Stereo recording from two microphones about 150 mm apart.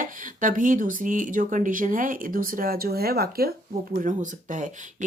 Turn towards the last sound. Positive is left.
turn(degrees=-55)  # may be behind; listen again after turning